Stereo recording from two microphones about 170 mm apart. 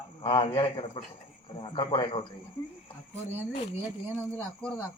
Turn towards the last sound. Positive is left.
turn(degrees=5)  # may be behind; listen again after turning